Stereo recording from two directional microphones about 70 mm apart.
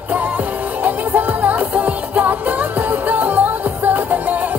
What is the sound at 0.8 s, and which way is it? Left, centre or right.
Music, right.